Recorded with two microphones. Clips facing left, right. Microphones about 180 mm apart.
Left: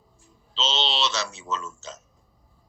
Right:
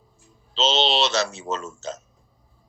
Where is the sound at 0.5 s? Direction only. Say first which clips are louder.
Right 7 dB; 55° right (ahead or behind).